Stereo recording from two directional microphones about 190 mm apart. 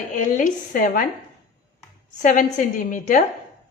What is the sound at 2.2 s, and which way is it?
A woman's voice, 45° left (ahead or behind).